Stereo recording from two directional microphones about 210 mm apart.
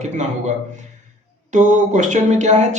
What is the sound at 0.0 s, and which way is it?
Speech, 35° right (ahead or behind).